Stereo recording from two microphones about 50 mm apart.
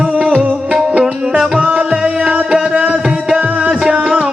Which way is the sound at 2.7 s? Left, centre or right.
Right.